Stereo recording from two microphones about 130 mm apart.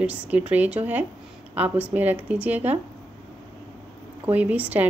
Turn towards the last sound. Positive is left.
turn(degrees=-10)  # may be behind; listen again after turning